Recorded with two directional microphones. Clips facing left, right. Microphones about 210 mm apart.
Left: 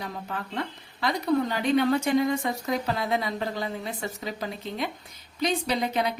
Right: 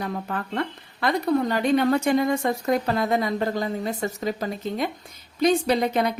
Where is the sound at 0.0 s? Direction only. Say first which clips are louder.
Right 5 dB; 55° right (ahead or behind).